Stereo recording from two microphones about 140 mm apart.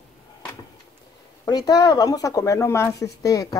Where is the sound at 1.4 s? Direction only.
30° left (ahead or behind).